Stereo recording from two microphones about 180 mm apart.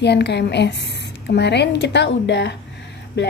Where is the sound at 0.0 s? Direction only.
70° left (ahead or behind).